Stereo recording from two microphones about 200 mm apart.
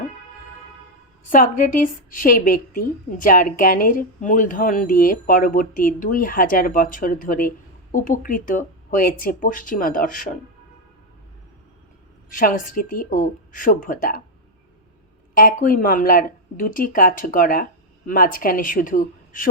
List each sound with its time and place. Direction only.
1.3 s a woman's voice: 45° left (ahead or behind)
12.4 s a woman's voice: 45° left (ahead or behind)
15.4 s a woman's voice: 45° left (ahead or behind)